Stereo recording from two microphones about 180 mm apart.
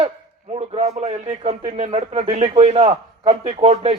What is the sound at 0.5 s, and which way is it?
A man's voice, 35° right (ahead or behind).